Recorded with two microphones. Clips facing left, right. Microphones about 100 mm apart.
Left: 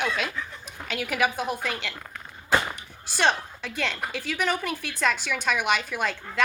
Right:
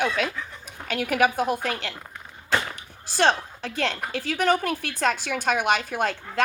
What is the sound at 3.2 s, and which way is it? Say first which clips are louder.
A woman's voice: right 3 dB; 35° right (ahead or behind).